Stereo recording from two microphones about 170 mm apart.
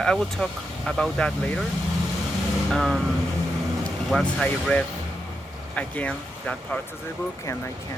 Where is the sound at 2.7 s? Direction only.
Centre (ahead or behind).